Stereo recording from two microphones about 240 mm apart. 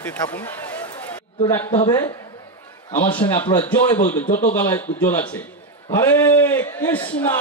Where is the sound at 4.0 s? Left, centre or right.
Left.